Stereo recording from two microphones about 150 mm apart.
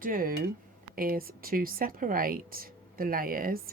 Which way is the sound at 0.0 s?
70° right (ahead or behind).